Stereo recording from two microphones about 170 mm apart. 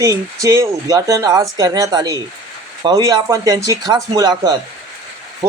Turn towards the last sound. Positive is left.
turn(degrees=-25)  # may be behind; listen again after turning